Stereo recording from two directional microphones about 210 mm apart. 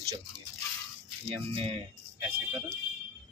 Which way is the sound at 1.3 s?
25° right (ahead or behind).